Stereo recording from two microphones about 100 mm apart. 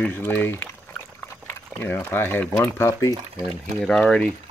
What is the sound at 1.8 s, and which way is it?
Speech, 20° left (ahead or behind).